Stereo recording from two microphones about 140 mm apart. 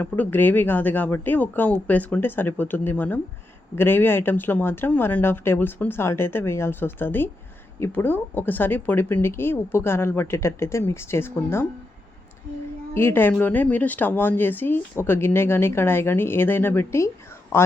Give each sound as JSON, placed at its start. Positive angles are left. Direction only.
{"t": 0.0, "sound": "speech", "side_deg": 15}
{"t": 12.9, "sound": "a man's voice", "side_deg": 15}